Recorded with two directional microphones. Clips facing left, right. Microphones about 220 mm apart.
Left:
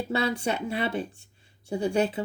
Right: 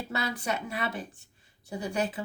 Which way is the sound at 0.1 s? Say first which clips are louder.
Left 5 dB; 30° left (ahead or behind).